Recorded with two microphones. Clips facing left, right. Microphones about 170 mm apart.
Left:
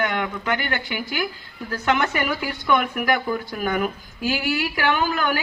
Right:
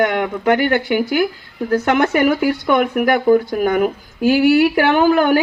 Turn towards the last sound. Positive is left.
turn(degrees=-50)  # may be behind; listen again after turning